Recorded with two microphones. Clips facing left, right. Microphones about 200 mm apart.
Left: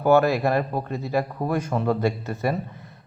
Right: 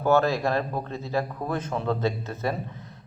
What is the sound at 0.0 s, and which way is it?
Speech, 15° left (ahead or behind).